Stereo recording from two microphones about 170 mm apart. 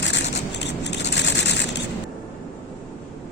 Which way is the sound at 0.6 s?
90° left.